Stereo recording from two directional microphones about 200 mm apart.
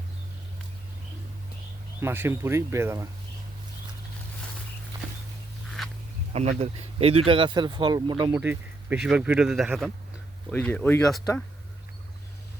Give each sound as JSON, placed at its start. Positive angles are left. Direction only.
{"t": 2.0, "sound": "speech", "side_deg": -10}
{"t": 5.8, "sound": "a sound", "side_deg": 0}
{"t": 6.3, "sound": "speech", "side_deg": -30}
{"t": 8.3, "sound": "speech", "side_deg": -10}